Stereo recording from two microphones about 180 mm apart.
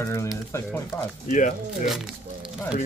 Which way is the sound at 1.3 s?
45° left (ahead or behind).